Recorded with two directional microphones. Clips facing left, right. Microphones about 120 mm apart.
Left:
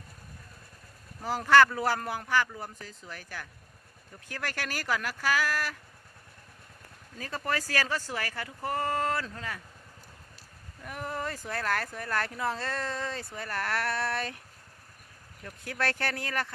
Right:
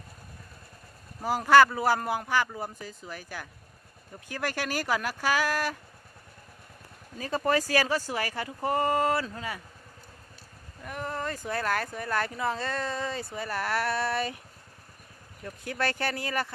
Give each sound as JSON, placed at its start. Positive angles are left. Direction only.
{"t": 1.2, "sound": "speech", "side_deg": -15}
{"t": 7.2, "sound": "speech", "side_deg": -20}
{"t": 10.8, "sound": "speech", "side_deg": 5}
{"t": 15.4, "sound": "speech", "side_deg": 0}